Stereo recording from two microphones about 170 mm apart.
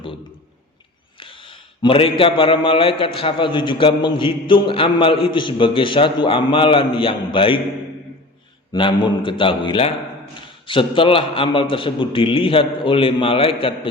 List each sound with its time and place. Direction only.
1.2 s a man's voice: 30° left (ahead or behind)
8.7 s a man's voice: 25° left (ahead or behind)